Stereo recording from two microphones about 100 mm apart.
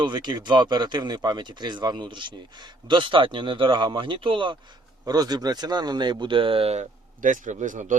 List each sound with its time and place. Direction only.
0.0 s speech: 50° right (ahead or behind)
5.0 s speech: 40° right (ahead or behind); by 6.7 s 65° right (ahead or behind)